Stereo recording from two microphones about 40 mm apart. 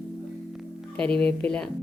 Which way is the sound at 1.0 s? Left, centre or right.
Left.